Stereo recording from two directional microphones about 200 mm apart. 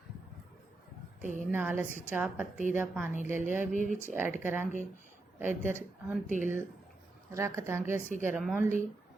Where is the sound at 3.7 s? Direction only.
40° right (ahead or behind).